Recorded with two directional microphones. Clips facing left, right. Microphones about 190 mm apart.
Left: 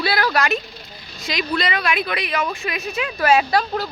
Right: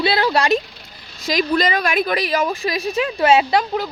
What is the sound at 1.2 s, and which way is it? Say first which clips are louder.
A woman's voice: right 5 dB; 40° right (ahead or behind).